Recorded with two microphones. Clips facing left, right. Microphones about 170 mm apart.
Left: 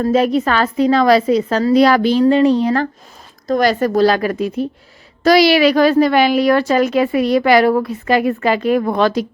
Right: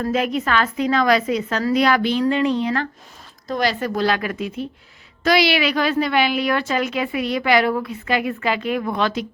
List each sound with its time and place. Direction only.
0.0 s a woman's voice: 35° left (ahead or behind)